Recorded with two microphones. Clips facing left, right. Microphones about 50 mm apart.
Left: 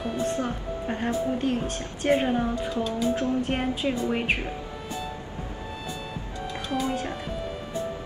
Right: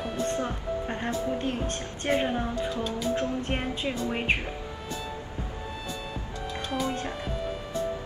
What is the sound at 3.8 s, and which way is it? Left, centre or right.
Speech, left.